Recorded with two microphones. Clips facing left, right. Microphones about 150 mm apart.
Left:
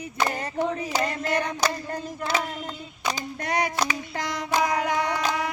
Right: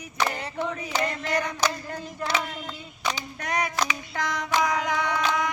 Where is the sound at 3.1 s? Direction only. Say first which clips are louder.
Left 2 dB; 35° left (ahead or behind).